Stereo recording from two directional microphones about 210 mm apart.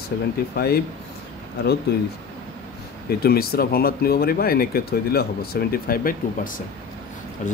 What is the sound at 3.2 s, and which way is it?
Speech, 45° left (ahead or behind).